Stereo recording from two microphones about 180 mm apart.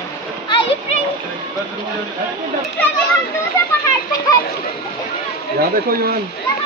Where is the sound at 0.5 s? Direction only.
30° left (ahead or behind).